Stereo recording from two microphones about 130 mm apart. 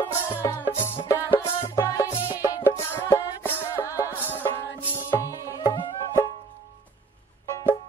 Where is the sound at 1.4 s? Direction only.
25° left (ahead or behind).